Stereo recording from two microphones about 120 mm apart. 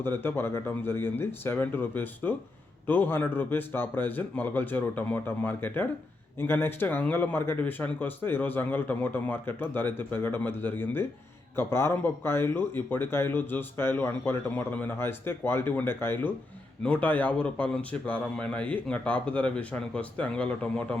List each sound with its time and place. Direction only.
0.0 s speech: 20° left (ahead or behind)